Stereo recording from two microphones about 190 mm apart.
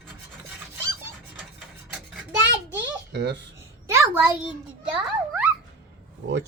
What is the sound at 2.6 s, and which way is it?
Babbling, 65° right (ahead or behind).